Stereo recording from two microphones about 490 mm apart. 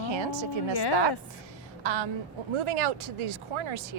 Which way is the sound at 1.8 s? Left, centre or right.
Right.